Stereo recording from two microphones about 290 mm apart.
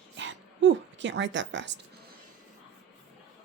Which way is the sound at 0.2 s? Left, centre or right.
Right.